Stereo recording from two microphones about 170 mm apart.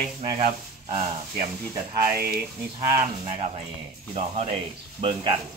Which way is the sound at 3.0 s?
45° right (ahead or behind).